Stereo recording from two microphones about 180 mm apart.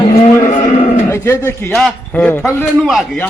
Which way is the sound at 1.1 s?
15° left (ahead or behind).